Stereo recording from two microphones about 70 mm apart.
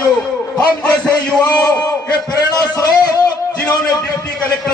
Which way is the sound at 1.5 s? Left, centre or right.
Left.